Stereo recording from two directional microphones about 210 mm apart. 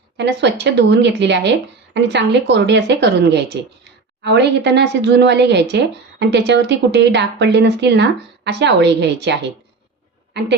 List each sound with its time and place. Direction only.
0.2 s speech: 55° right (ahead or behind)